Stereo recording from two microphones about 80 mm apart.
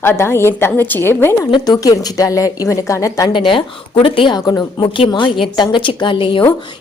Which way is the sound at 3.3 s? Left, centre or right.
Left.